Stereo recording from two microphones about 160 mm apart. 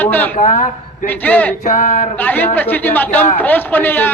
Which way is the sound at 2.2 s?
10° left (ahead or behind).